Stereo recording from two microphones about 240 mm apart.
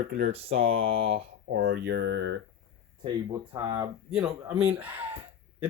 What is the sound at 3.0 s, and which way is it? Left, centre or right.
Speech, centre.